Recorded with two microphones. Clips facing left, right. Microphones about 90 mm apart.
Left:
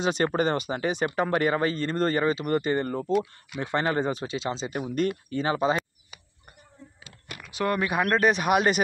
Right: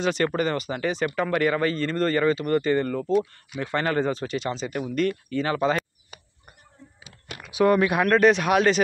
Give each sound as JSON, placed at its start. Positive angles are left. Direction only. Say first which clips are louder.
{"t": 0.0, "sound": "speech", "louder": "right 1 dB", "side_deg": 20}
{"t": 3.1, "sound": "speech", "louder": "right 2 dB", "side_deg": 90}
{"t": 3.5, "sound": "speech", "louder": "right 1 dB", "side_deg": 20}
{"t": 7.5, "sound": "speech", "louder": "right 6 dB", "side_deg": -5}